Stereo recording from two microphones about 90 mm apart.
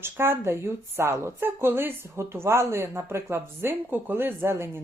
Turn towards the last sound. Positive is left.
turn(degrees=-25)  # may be behind; listen again after turning